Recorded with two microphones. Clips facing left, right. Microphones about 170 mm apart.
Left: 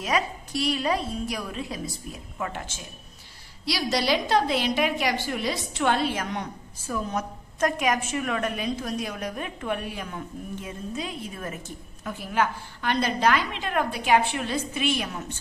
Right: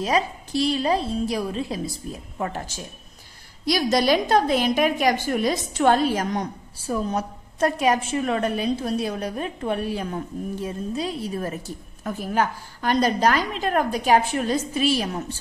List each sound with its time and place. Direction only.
0.0 s a woman's voice: 30° right (ahead or behind)
3.6 s a woman's voice: 50° right (ahead or behind)